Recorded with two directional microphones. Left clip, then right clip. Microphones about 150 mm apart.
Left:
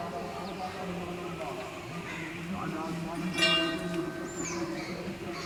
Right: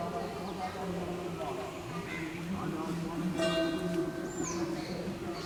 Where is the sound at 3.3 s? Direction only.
25° left (ahead or behind).